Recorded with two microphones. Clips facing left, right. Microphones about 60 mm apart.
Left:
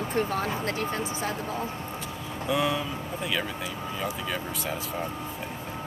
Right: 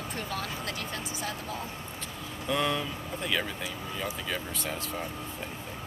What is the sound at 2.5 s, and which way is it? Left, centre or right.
Speech, centre.